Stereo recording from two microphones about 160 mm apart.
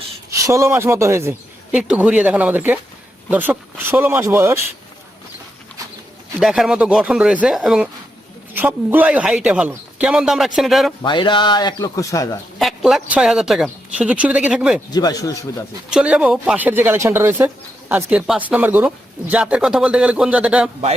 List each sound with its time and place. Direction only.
0.3 s speech: 20° right (ahead or behind)
6.4 s speech: centre (ahead or behind)
11.0 s speech: 30° left (ahead or behind)
12.5 s speech: centre (ahead or behind)
14.9 s speech: 25° left (ahead or behind)
15.9 s speech: 5° right (ahead or behind)